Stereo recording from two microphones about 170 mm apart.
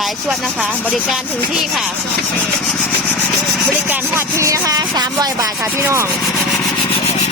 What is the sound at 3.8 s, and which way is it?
Speech, 10° right (ahead or behind).